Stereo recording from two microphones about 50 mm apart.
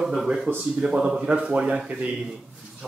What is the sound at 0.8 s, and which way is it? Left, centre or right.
Speech, right.